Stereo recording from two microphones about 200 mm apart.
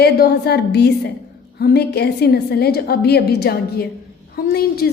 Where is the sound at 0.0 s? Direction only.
55° left (ahead or behind).